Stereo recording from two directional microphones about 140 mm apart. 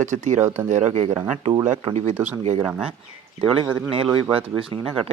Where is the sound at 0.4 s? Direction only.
15° right (ahead or behind).